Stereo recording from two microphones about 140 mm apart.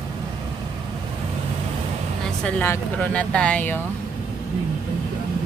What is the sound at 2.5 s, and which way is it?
Speech, 10° left (ahead or behind).